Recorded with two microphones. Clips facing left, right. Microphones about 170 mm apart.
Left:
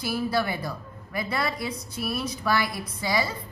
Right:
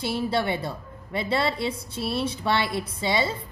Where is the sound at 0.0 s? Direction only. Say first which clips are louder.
Right 1 dB; 25° right (ahead or behind).